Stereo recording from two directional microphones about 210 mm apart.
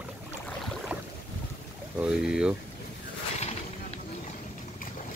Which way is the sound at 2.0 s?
5° right (ahead or behind).